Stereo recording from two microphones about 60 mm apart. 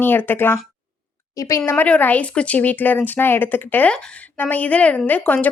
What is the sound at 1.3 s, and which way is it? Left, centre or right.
Speech, left.